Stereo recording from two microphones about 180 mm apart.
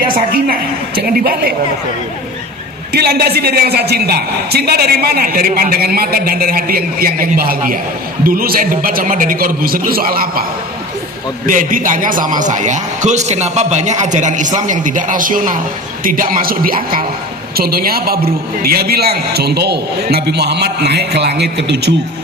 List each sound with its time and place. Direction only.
0.3 s a woman's voice: 55° right (ahead or behind)
2.9 s a woman's voice: 60° right (ahead or behind)
11.4 s a man's voice: 50° right (ahead or behind); by 21.9 s 70° right (ahead or behind)